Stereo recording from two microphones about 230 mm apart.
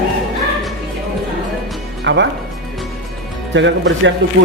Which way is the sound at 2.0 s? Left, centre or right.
Right.